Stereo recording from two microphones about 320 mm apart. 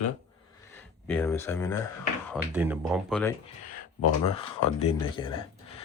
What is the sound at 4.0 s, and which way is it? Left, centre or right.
Speech, centre.